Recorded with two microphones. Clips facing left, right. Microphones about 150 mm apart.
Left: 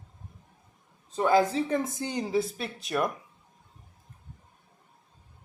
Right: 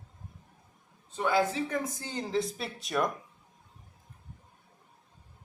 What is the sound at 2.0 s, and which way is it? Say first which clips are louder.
Speech: left 4 dB; 15° left (ahead or behind).